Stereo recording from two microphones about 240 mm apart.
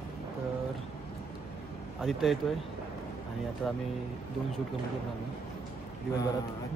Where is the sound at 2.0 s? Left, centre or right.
Centre.